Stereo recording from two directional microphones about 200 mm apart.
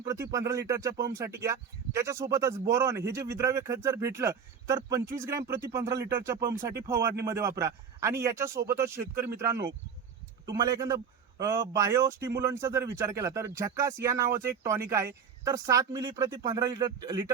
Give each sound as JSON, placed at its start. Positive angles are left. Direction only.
{"t": 0.0, "sound": "speech", "side_deg": -15}